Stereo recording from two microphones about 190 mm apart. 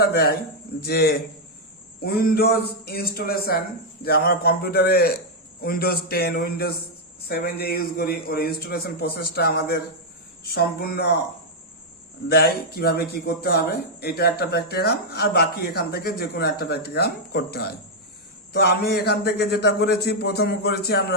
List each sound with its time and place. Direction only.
0.0 s a man's voice: 55° left (ahead or behind)
12.3 s speech: 55° left (ahead or behind)